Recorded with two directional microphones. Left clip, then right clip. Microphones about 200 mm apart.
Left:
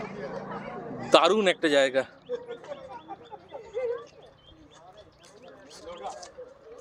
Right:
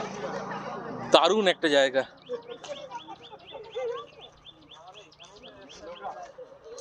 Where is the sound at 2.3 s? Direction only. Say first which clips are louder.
Left 1 dB; 30° left (ahead or behind).